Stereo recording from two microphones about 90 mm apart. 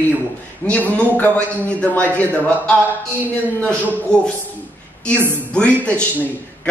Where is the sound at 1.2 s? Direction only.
10° left (ahead or behind).